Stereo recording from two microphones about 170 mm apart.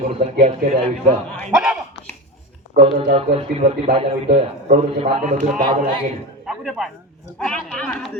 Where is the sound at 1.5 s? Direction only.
Centre (ahead or behind).